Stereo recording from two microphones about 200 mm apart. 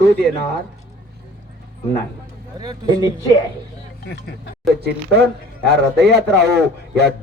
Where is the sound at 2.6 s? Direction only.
20° right (ahead or behind).